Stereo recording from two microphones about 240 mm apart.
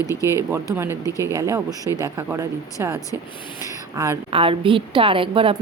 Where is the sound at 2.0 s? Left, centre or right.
Centre.